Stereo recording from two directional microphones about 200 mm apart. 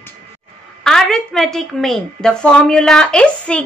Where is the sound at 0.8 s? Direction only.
Centre (ahead or behind).